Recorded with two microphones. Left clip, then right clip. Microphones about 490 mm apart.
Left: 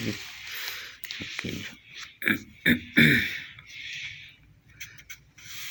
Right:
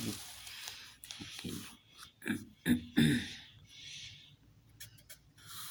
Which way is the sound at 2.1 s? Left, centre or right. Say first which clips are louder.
Left 14 dB; right.